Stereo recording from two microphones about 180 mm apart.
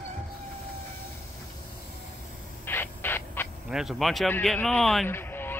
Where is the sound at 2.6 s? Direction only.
10° left (ahead or behind).